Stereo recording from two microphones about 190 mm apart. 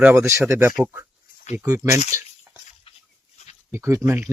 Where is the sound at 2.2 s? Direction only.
10° right (ahead or behind).